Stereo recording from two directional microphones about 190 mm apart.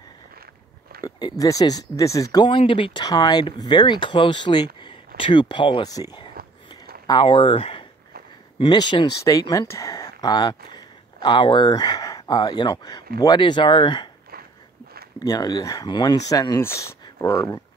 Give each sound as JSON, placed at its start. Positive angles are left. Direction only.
{"t": 1.4, "sound": "speech", "side_deg": 20}
{"t": 6.4, "sound": "a sound", "side_deg": -55}
{"t": 7.1, "sound": "speech", "side_deg": 25}
{"t": 15.1, "sound": "speech", "side_deg": 20}